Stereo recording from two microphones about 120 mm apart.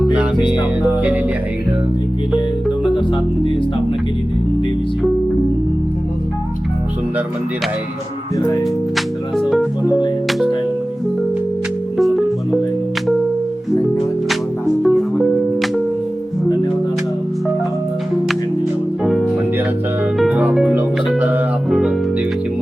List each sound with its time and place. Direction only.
8.4 s speech: 35° left (ahead or behind)
9.0 s music: centre (ahead or behind)
11.9 s music: centre (ahead or behind)
14.8 s music: centre (ahead or behind)
19.0 s music: 5° right (ahead or behind)
21.7 s music: 5° right (ahead or behind)